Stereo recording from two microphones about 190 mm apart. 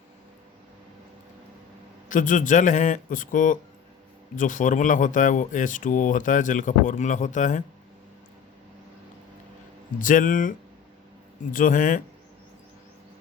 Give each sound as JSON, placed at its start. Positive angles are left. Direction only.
{"t": 2.0, "sound": "speech", "side_deg": 45}
{"t": 10.0, "sound": "speech", "side_deg": 45}
{"t": 11.5, "sound": "speech", "side_deg": 45}